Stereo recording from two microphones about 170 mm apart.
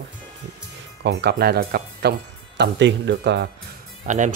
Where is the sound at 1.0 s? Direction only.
80° right.